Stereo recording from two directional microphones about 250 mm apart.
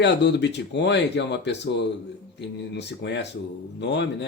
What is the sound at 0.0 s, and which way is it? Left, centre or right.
Speech, left.